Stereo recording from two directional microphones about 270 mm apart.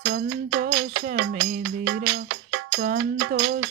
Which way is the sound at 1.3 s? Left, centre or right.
Right.